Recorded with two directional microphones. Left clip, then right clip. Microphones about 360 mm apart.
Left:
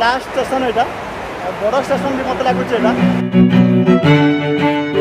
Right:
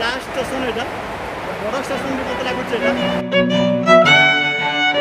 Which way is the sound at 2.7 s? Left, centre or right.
Centre.